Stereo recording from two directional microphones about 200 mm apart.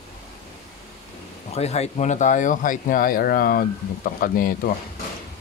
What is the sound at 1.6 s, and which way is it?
Speech, 30° left (ahead or behind).